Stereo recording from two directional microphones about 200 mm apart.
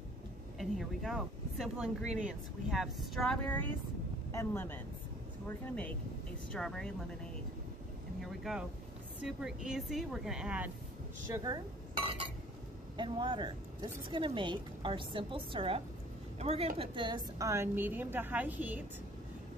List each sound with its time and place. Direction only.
0.6 s a woman's voice: centre (ahead or behind)
8.2 s a woman's voice: centre (ahead or behind)
11.3 s a woman's voice: 20° right (ahead or behind)